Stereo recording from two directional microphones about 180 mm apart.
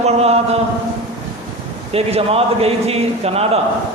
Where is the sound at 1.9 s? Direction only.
35° right (ahead or behind).